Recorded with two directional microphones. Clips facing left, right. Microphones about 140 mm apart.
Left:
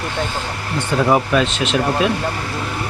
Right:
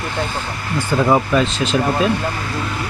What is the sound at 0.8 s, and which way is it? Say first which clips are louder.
Speech: right 1 dB; centre (ahead or behind).